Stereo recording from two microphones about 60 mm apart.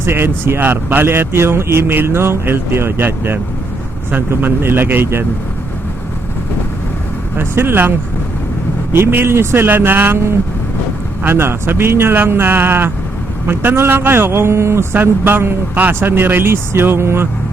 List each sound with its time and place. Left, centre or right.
0.0 s speech: right
7.3 s a man's voice: right
14.9 s speech: right